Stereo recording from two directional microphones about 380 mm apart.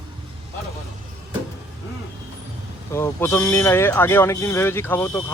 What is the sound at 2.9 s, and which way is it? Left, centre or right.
Speech, centre.